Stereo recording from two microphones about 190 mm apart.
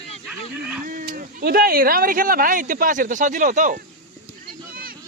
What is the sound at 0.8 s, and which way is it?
Speech, 45° right (ahead or behind).